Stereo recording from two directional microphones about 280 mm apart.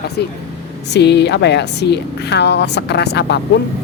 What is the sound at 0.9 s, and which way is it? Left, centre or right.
A woman's voice, left.